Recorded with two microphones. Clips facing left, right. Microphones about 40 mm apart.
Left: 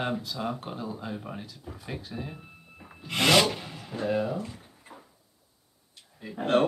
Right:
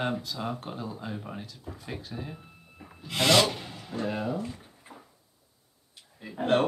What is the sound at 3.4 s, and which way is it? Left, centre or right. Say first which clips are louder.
Speech: even; centre.